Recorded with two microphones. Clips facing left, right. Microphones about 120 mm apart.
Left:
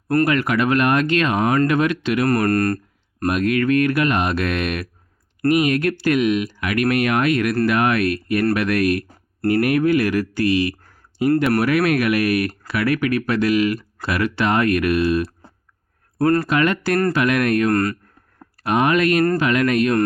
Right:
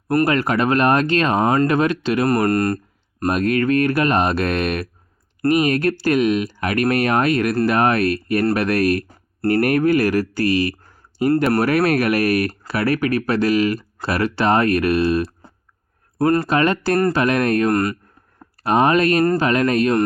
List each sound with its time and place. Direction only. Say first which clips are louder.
0.3 s speech: right 1 dB; 35° right (ahead or behind)
3.2 s speech: even; 35° right (ahead or behind)
16.1 s speech: even; 20° right (ahead or behind)
16.5 s speech: right 1 dB; 35° right (ahead or behind)
17.7 s speech: even; 20° right (ahead or behind)
18.6 s speech: right 2 dB; 35° right (ahead or behind)